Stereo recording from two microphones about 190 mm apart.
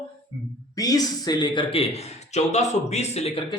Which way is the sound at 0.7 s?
20° left (ahead or behind).